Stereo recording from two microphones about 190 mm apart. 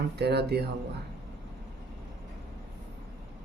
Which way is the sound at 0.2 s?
60° right (ahead or behind).